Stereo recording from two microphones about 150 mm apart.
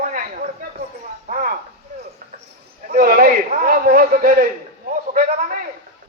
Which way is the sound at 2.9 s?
70° right (ahead or behind).